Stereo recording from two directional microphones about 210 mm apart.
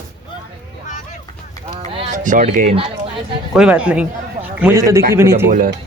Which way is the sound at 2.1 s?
35° right (ahead or behind).